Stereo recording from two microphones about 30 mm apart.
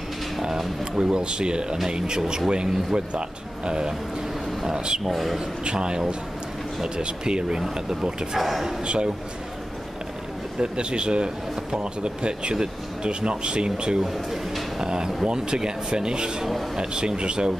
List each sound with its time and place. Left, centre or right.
0.9 s speech: right
1.2 s speech: right
5.0 s a man's voice: centre
5.6 s speech: right
8.4 s a man's voice: centre
8.8 s speech: right
10.6 s speech: right
14.0 s a man's voice: centre
14.8 s speech: right